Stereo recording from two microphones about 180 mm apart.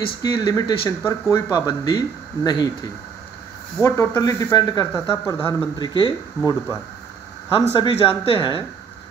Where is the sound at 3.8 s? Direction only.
15° left (ahead or behind).